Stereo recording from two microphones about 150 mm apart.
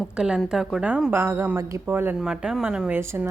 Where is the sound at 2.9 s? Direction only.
15° right (ahead or behind).